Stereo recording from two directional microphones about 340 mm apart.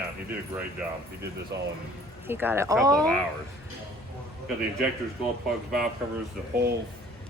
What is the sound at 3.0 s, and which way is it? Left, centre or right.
Speech, centre.